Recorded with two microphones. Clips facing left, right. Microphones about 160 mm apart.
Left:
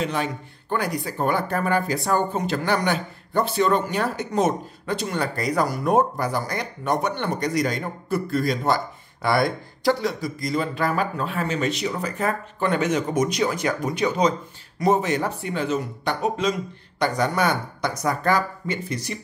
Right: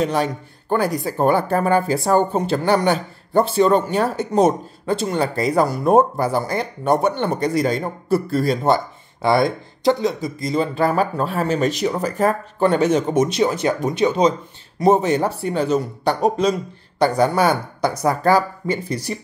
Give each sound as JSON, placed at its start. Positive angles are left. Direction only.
{"t": 0.0, "sound": "speech", "side_deg": -40}